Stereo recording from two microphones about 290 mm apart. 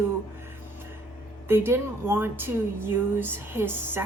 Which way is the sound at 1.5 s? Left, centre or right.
Centre.